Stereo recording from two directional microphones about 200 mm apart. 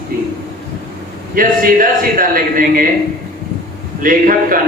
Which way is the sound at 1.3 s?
45° right (ahead or behind).